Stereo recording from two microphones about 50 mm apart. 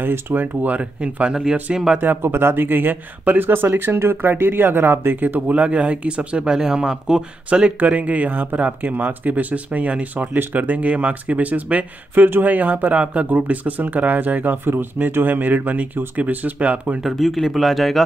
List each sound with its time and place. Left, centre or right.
0.0 s speech: right
1.3 s speech: centre
2.0 s speech: right; by 7.2 s centre
7.4 s speech: right
17.1 s speech: centre